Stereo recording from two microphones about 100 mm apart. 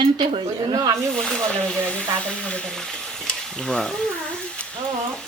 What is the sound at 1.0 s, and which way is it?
Stir, 5° left (ahead or behind).